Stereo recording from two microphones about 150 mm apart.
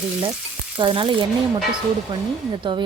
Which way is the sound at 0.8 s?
35° right (ahead or behind).